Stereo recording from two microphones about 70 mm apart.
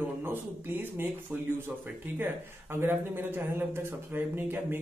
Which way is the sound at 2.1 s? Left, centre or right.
Right.